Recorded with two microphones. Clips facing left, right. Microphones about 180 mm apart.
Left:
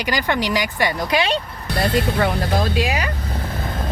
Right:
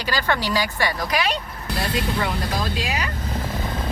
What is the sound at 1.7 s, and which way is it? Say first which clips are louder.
Speech: left 5 dB; 60° left (ahead or behind).